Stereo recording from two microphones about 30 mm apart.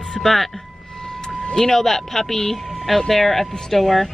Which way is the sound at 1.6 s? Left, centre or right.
Centre.